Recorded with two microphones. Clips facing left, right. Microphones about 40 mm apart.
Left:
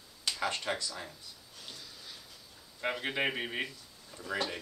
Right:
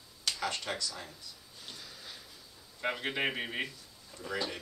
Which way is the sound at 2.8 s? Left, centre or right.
Centre.